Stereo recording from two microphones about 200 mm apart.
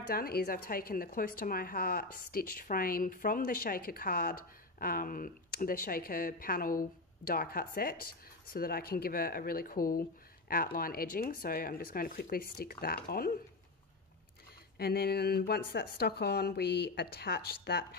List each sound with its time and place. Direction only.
0.1 s speech: 50° left (ahead or behind)
14.8 s speech: 50° left (ahead or behind)